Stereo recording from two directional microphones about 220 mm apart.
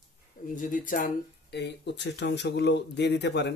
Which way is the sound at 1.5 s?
50° left (ahead or behind).